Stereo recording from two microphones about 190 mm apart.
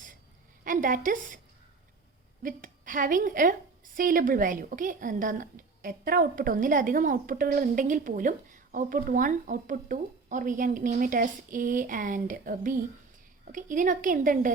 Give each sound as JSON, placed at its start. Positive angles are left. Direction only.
{"t": 0.6, "sound": "a woman's voice", "side_deg": -45}
{"t": 2.4, "sound": "a woman's voice", "side_deg": -45}